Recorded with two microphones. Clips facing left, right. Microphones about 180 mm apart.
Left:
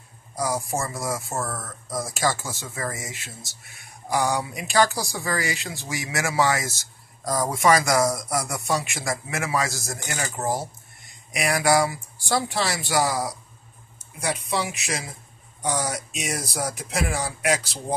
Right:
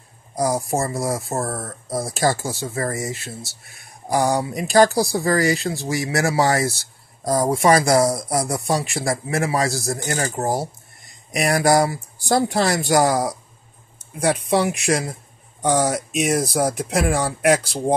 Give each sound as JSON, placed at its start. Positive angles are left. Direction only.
{"t": 0.7, "sound": "speech", "side_deg": -35}